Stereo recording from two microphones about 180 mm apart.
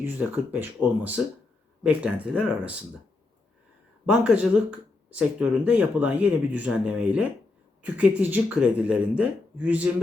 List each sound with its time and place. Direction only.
0.0 s speech: 10° right (ahead or behind)
4.0 s speech: 5° right (ahead or behind)